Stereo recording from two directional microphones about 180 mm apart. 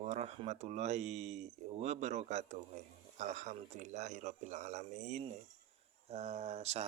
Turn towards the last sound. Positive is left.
turn(degrees=-35)  # may be behind; listen again after turning